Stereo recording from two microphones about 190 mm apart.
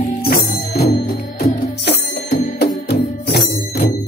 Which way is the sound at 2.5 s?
60° left (ahead or behind).